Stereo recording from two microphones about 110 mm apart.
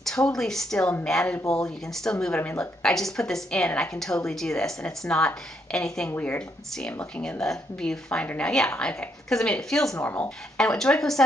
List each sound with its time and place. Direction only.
0.0 s a woman's voice: 5° left (ahead or behind)
2.9 s a woman's voice: 5° left (ahead or behind)
10.0 s speech: 20° left (ahead or behind)
10.6 s a woman's voice: 5° left (ahead or behind)